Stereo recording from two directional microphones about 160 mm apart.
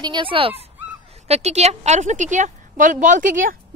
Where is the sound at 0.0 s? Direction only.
30° right (ahead or behind).